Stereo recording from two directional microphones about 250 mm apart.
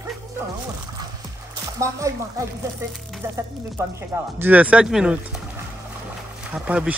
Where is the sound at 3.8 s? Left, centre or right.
Centre.